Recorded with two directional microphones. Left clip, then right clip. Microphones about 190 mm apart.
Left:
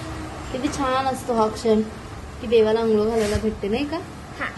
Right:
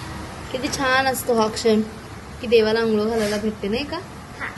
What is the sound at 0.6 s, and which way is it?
A woman's voice, 5° right (ahead or behind).